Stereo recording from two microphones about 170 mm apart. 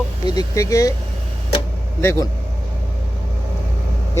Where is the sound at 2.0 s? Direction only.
15° left (ahead or behind).